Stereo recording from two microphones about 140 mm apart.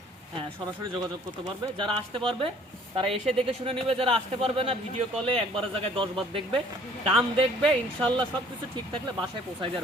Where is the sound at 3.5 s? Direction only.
45° right (ahead or behind).